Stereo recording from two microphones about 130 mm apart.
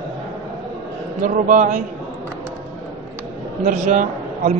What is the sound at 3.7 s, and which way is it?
Speech, 80° right.